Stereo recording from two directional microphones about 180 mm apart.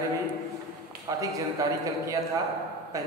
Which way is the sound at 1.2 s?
20° right (ahead or behind).